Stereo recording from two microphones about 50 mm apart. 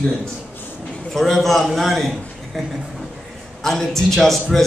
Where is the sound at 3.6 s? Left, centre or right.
Centre.